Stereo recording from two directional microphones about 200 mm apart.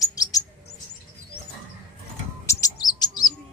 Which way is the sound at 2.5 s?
15° left (ahead or behind).